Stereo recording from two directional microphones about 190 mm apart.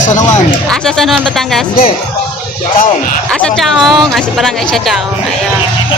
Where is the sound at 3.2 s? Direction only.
5° left (ahead or behind).